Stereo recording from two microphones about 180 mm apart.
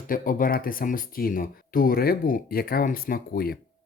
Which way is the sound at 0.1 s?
50° left (ahead or behind).